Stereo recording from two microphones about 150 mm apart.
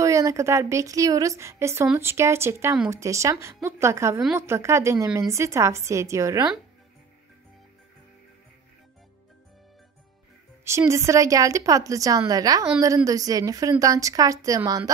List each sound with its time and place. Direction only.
0.0 s a woman's voice: 20° right (ahead or behind)
10.6 s a woman's voice: 20° right (ahead or behind)